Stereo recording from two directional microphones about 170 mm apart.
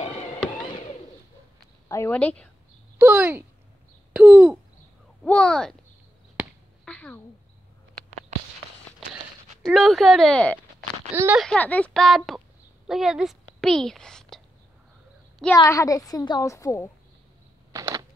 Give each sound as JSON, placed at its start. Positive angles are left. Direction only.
{"t": 1.9, "sound": "speech", "side_deg": 15}
{"t": 3.0, "sound": "speech", "side_deg": -10}
{"t": 5.2, "sound": "speech", "side_deg": 5}
{"t": 6.3, "sound": "a sound", "side_deg": 5}
{"t": 9.7, "sound": "speech", "side_deg": 0}
{"t": 11.1, "sound": "speech", "side_deg": -10}
{"t": 11.3, "sound": "speech", "side_deg": 5}
{"t": 12.8, "sound": "a sound", "side_deg": 0}
{"t": 15.5, "sound": "a woman's voice", "side_deg": 20}
{"t": 17.7, "sound": "a sound", "side_deg": -20}